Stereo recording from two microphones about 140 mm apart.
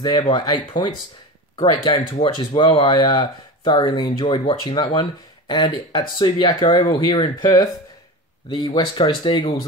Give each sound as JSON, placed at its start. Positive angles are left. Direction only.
{"t": 0.0, "sound": "speech", "side_deg": 30}